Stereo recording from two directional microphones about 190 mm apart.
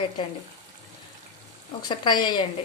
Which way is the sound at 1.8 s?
25° left (ahead or behind).